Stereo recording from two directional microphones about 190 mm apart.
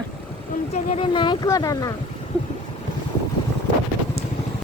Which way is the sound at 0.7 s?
30° left (ahead or behind).